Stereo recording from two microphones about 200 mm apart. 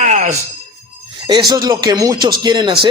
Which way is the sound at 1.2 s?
20° right (ahead or behind).